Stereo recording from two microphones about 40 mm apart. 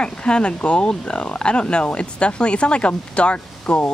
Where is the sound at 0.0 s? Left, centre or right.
Left.